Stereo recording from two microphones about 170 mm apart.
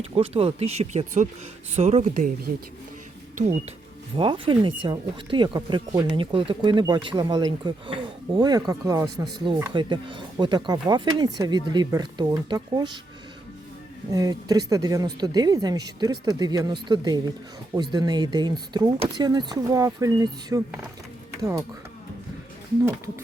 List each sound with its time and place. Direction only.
0.0 s speech: 35° right (ahead or behind)
3.3 s speech: 45° right (ahead or behind)
4.2 s speech: 30° right (ahead or behind)
14.1 s speech: 20° right (ahead or behind)